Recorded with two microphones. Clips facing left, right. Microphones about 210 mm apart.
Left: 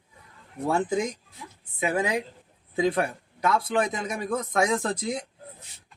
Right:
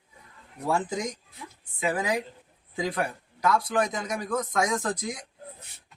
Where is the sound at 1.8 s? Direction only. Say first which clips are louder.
Left 2 dB; 25° left (ahead or behind).